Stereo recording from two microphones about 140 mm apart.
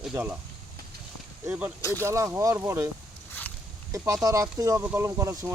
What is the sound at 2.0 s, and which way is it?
Speech, 20° right (ahead or behind).